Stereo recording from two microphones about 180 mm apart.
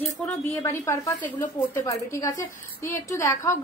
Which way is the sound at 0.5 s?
15° left (ahead or behind).